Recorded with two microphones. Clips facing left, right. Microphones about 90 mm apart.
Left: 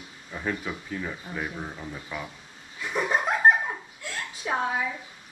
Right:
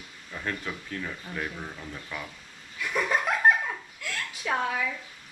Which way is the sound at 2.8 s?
25° left (ahead or behind).